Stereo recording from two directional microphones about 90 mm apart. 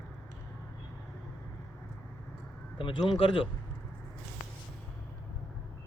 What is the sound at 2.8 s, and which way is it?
Speech, 75° left (ahead or behind).